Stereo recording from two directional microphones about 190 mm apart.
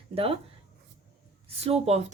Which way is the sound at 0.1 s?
30° right (ahead or behind).